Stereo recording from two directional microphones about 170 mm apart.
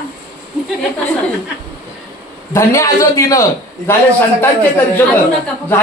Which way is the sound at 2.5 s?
20° left (ahead or behind).